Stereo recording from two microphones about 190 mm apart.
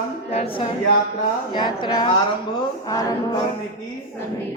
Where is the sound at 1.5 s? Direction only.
25° left (ahead or behind).